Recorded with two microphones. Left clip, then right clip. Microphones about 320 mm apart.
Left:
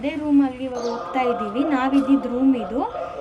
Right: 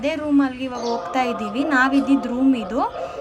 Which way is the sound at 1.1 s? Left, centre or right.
Centre.